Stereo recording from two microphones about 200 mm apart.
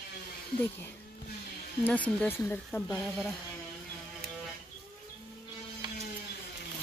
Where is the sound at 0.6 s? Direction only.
10° left (ahead or behind).